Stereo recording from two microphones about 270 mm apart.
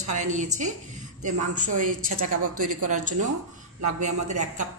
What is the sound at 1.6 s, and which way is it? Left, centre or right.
Speech, right.